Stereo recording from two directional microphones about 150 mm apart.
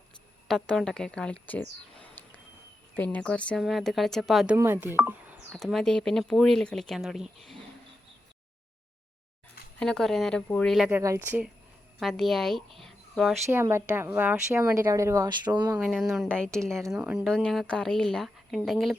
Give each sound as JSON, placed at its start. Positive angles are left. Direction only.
{"t": 0.4, "sound": "speech", "side_deg": 0}
{"t": 2.9, "sound": "speech", "side_deg": 10}
{"t": 4.5, "sound": "speech", "side_deg": -15}
{"t": 5.5, "sound": "speech", "side_deg": 0}
{"t": 9.7, "sound": "speech", "side_deg": 5}
{"t": 10.8, "sound": "speech", "side_deg": -10}
{"t": 11.9, "sound": "speech", "side_deg": 0}
{"t": 13.5, "sound": "a woman's voice", "side_deg": -15}
{"t": 16.1, "sound": "speech", "side_deg": 0}
{"t": 17.2, "sound": "speech", "side_deg": 5}